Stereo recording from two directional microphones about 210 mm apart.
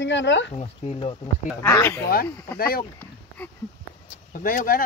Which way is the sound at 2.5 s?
45° left (ahead or behind).